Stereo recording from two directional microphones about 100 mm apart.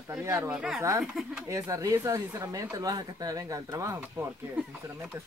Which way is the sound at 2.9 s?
40° right (ahead or behind).